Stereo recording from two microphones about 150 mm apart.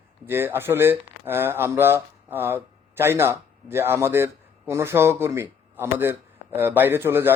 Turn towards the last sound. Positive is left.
turn(degrees=-15)  # may be behind; listen again after turning